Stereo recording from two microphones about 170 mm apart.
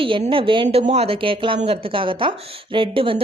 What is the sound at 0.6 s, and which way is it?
A woman's voice, 40° right (ahead or behind).